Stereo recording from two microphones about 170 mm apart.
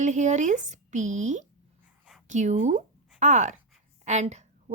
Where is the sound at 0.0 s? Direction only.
45° right (ahead or behind).